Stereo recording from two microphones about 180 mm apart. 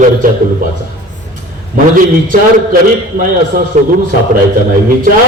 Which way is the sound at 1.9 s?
50° right (ahead or behind).